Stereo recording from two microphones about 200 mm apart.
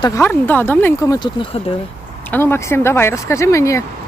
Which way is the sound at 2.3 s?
10° left (ahead or behind).